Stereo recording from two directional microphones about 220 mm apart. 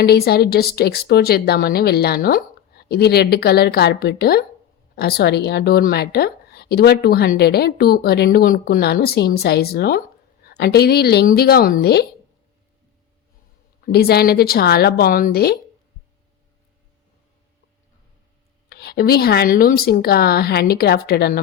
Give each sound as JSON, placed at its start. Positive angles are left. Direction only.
{"t": 0.0, "sound": "a woman's voice", "side_deg": 45}
{"t": 13.8, "sound": "a woman's voice", "side_deg": 45}
{"t": 18.7, "sound": "a woman's voice", "side_deg": 45}